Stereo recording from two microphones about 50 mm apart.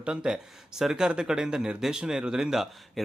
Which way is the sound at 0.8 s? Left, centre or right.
Centre.